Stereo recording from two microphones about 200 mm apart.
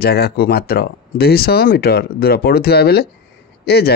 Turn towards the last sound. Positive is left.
turn(degrees=55)  # may be behind; listen again after turning